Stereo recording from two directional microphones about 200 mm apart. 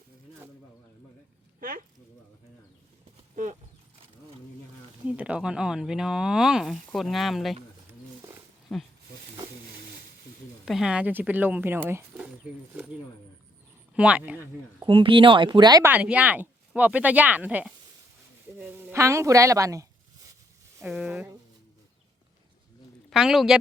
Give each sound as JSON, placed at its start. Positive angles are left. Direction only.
{"t": 3.3, "sound": "horse", "side_deg": -40}
{"t": 5.0, "sound": "speech", "side_deg": -5}
{"t": 8.7, "sound": "speech", "side_deg": 5}
{"t": 10.7, "sound": "speech", "side_deg": 0}
{"t": 12.7, "sound": "a sound", "side_deg": -5}
{"t": 13.9, "sound": "speech", "side_deg": -5}
{"t": 14.8, "sound": "a woman's voice", "side_deg": -25}
{"t": 20.8, "sound": "speech", "side_deg": -5}
{"t": 23.0, "sound": "speech", "side_deg": 0}